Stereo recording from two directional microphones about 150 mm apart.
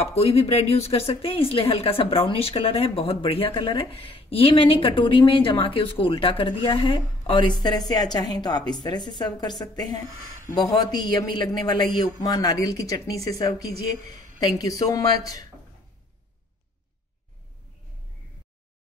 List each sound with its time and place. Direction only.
0.0 s speech: 45° left (ahead or behind); by 15.4 s 25° left (ahead or behind)